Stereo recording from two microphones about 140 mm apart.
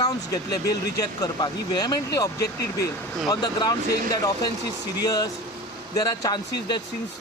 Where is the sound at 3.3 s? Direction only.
30° left (ahead or behind).